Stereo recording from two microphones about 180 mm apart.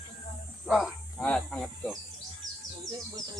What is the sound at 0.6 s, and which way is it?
Speech, centre (ahead or behind).